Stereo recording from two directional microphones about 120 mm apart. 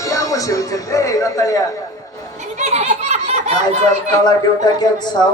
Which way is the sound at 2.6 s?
65° right (ahead or behind).